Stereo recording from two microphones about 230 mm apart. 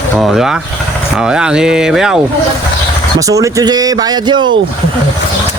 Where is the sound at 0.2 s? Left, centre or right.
Centre.